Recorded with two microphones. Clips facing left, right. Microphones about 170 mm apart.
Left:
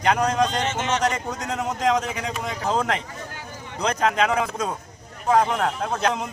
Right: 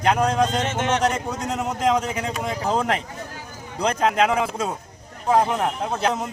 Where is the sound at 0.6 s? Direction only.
55° right (ahead or behind).